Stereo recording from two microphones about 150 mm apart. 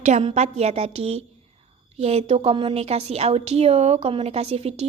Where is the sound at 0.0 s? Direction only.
50° right (ahead or behind).